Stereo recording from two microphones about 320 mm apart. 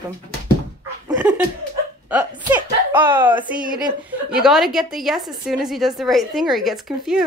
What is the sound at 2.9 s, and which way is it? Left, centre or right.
A woman's voice, centre.